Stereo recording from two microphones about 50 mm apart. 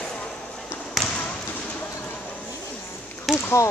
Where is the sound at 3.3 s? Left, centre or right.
Centre.